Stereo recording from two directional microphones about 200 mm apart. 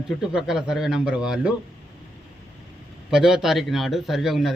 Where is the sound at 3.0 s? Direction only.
5° right (ahead or behind).